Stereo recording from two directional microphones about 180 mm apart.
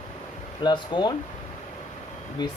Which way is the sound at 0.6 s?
25° left (ahead or behind).